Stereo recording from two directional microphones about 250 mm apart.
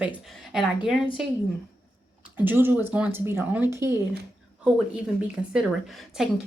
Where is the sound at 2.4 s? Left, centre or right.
Centre.